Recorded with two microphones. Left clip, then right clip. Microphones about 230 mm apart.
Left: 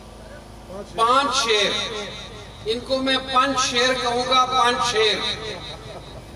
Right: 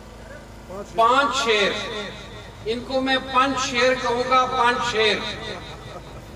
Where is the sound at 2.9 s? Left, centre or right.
Left.